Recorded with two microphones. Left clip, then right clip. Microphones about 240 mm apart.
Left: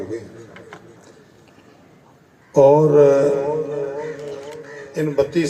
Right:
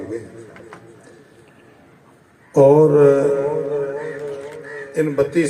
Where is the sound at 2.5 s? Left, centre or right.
Right.